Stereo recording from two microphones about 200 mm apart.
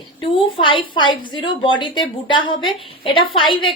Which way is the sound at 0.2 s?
25° left (ahead or behind).